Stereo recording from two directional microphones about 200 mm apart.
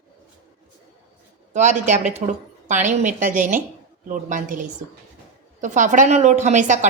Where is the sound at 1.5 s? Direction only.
35° right (ahead or behind).